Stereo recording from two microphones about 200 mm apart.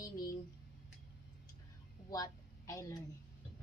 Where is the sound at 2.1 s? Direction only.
15° left (ahead or behind).